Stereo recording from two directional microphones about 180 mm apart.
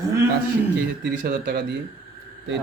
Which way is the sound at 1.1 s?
50° right (ahead or behind).